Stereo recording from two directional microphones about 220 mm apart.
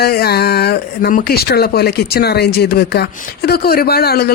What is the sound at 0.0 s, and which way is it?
Speech, 45° left (ahead or behind).